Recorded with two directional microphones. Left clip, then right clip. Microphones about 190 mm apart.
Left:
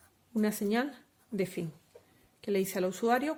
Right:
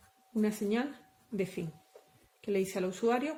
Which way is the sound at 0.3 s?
45° left (ahead or behind).